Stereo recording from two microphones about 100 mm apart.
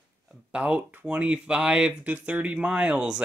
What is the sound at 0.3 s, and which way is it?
Speech, 10° right (ahead or behind).